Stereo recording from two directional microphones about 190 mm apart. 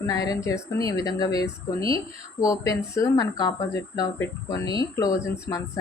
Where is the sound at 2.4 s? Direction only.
15° left (ahead or behind).